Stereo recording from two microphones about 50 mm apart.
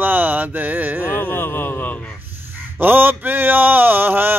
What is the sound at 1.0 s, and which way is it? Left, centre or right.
Speech, left.